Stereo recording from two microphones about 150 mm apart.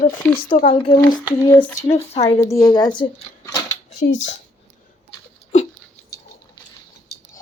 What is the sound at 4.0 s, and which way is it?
Speech, 60° left (ahead or behind).